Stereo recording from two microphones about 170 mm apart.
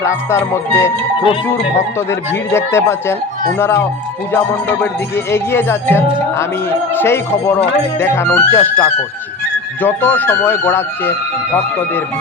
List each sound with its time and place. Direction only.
0.0 s music: 15° left (ahead or behind)
2.5 s music: 15° left (ahead or behind)